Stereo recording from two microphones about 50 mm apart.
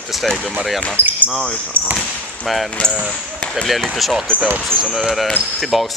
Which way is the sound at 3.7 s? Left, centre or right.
Centre.